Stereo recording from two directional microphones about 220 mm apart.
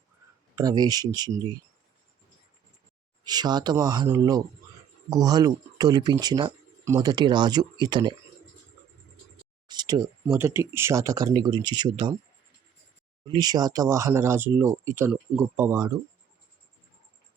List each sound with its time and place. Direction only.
0.5 s speech: 15° right (ahead or behind)
3.2 s speech: 20° right (ahead or behind)
9.6 s speech: 20° right (ahead or behind)
13.2 s speech: 20° right (ahead or behind)